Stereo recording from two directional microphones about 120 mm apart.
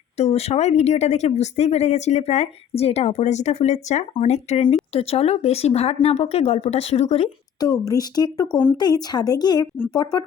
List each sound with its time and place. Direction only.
0.2 s speech: 65° left (ahead or behind)
4.7 s speech: 60° left (ahead or behind)
7.6 s speech: 30° left (ahead or behind)